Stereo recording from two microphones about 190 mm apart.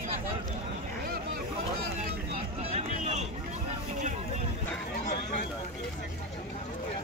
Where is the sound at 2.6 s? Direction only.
35° right (ahead or behind).